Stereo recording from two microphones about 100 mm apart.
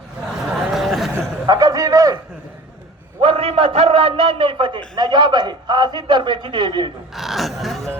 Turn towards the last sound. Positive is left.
turn(degrees=0)  # may be behind; listen again after turning